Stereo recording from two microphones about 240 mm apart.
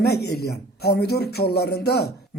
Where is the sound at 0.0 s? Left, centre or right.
Left.